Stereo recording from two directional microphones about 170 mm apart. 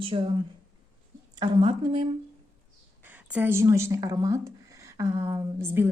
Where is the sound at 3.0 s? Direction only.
10° right (ahead or behind).